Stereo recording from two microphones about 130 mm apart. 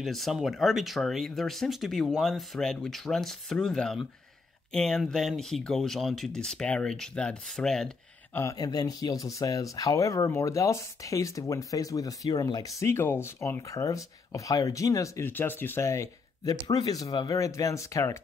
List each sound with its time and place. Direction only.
0.0 s speech: centre (ahead or behind)
8.4 s speech: 25° left (ahead or behind)